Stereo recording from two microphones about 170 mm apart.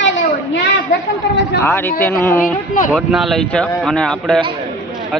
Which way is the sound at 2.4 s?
50° left (ahead or behind).